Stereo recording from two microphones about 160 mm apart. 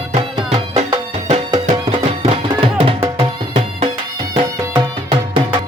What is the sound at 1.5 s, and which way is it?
Music, 35° right (ahead or behind).